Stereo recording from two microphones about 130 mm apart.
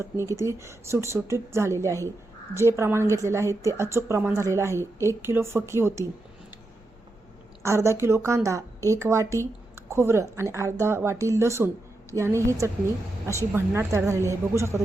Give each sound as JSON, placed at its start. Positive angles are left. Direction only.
{"t": 0.0, "sound": "speech", "side_deg": -20}
{"t": 7.6, "sound": "speech", "side_deg": -20}